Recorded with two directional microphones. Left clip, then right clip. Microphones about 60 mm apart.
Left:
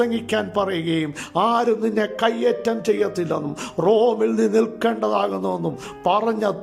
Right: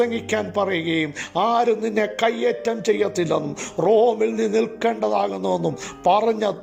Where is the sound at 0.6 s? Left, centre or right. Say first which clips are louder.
Right 1 dB; left.